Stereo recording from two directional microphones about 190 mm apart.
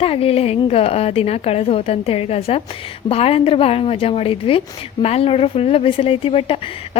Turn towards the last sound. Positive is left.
turn(degrees=30)  # may be behind; listen again after turning